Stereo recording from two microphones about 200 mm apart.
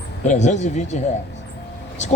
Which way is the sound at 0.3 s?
35° left (ahead or behind).